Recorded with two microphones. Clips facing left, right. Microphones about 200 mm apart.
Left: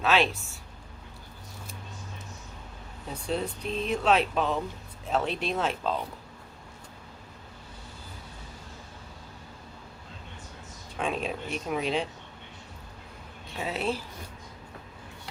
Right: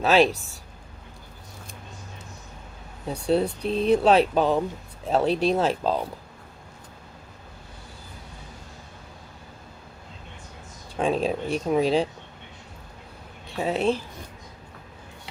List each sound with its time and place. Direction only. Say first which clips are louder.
0.0 s speech: right 6 dB; 40° right (ahead or behind)
3.1 s speech: right 8 dB; 35° right (ahead or behind)
10.9 s speech: right 7 dB; 35° right (ahead or behind)
13.6 s speech: right 7 dB; 30° right (ahead or behind)